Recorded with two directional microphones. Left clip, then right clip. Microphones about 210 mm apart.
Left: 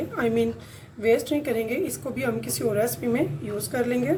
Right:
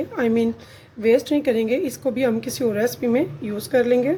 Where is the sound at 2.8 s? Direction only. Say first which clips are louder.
Right 4 dB; 40° right (ahead or behind).